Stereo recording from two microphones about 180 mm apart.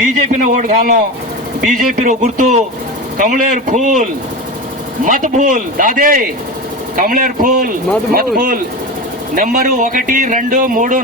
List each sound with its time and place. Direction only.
0.4 s speech: 50° right (ahead or behind)